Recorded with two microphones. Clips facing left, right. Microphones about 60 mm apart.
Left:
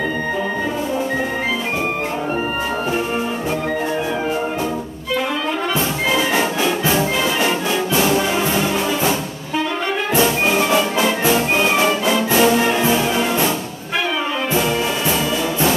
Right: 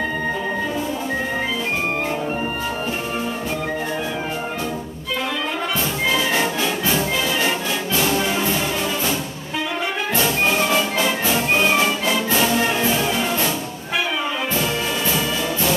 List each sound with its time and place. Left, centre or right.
6.1 s music: centre
10.2 s music: centre